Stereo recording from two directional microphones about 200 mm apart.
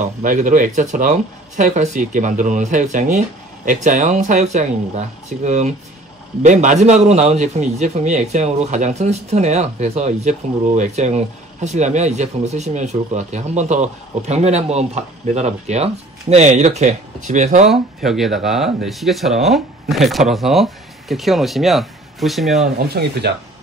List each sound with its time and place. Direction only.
0.2 s speech: 40° right (ahead or behind)
17.6 s speech: centre (ahead or behind)
22.8 s speech: 55° right (ahead or behind)